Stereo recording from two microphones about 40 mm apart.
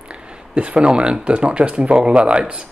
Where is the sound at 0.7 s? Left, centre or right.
Right.